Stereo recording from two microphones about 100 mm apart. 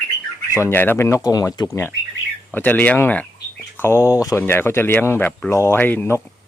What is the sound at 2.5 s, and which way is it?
Speech, 20° left (ahead or behind).